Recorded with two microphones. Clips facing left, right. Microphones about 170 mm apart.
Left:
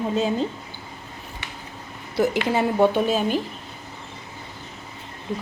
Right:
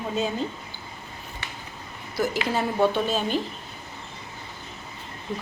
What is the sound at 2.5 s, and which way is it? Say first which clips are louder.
Speech: left 3 dB; 15° left (ahead or behind).